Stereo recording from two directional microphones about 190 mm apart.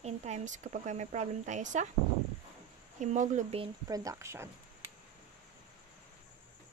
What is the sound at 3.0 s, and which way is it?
Speech, 40° right (ahead or behind).